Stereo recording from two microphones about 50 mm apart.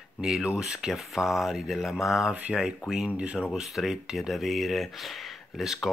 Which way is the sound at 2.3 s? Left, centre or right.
Right.